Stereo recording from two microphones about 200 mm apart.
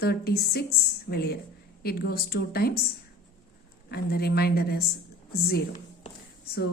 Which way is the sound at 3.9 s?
50° left (ahead or behind).